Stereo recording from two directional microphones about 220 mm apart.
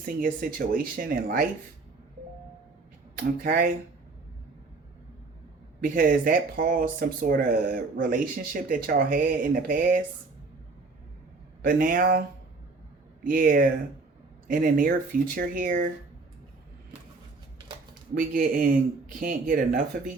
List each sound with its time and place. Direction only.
0.0 s speech: 40° right (ahead or behind)
3.2 s speech: 40° right (ahead or behind)
5.8 s speech: 40° right (ahead or behind)
11.6 s speech: 40° right (ahead or behind)
13.2 s speech: 40° right (ahead or behind)
18.2 s speech: 40° right (ahead or behind)